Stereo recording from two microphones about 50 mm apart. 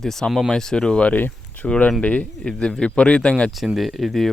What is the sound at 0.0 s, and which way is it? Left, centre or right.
Speech, centre.